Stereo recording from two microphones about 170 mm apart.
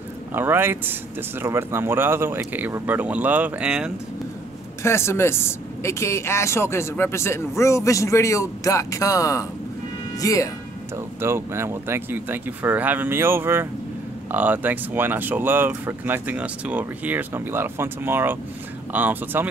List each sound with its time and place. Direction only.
0.3 s speech: 10° right (ahead or behind)
4.8 s speech: 15° left (ahead or behind)
11.1 s speech: 15° right (ahead or behind)